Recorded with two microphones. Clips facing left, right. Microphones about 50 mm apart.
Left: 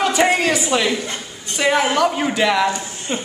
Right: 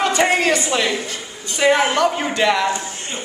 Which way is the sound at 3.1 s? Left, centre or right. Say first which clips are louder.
Left 7 dB; left.